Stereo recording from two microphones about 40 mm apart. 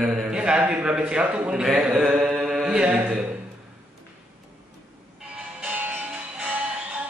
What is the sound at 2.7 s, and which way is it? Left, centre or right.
Mantra, right.